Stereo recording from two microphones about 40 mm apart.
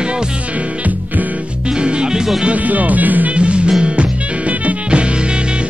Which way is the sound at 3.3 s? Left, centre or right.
Right.